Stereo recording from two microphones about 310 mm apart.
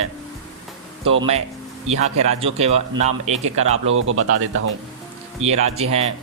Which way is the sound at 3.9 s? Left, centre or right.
Right.